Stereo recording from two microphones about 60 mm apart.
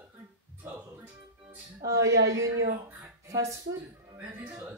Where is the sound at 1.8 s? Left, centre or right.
Right.